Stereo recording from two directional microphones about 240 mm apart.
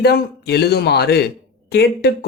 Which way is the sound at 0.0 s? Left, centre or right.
Left.